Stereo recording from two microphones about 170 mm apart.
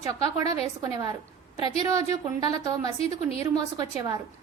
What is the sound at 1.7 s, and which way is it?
Speech, 35° left (ahead or behind).